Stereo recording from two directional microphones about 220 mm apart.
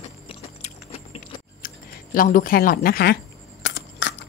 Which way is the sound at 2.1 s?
40° left (ahead or behind).